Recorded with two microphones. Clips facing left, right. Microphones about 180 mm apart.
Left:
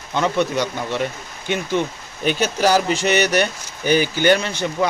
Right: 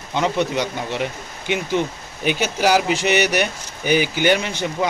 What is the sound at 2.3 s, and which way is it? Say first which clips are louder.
Speech: left 1 dB; 10° right (ahead or behind).